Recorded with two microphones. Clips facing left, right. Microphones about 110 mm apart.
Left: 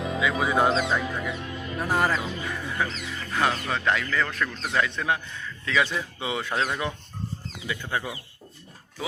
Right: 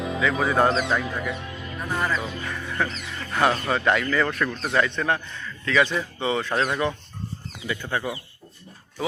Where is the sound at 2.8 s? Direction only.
10° left (ahead or behind).